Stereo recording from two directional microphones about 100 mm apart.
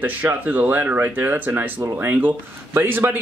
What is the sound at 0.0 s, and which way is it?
Speech, 20° right (ahead or behind).